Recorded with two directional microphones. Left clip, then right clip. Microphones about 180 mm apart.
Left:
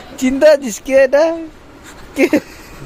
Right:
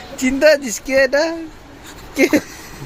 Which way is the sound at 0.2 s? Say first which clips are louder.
Left 3 dB; 30° left (ahead or behind).